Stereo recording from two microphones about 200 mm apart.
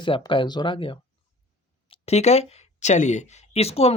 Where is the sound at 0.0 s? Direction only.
25° left (ahead or behind).